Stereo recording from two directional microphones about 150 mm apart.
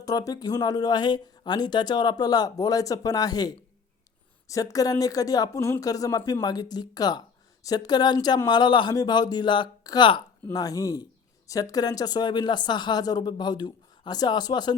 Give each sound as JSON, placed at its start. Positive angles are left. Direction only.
{"t": 0.0, "sound": "speech", "side_deg": 25}